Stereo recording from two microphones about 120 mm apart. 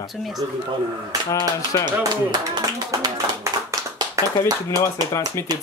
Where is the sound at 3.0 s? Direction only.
35° right (ahead or behind).